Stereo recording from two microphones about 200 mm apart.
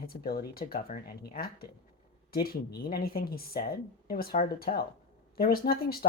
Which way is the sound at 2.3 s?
50° left (ahead or behind).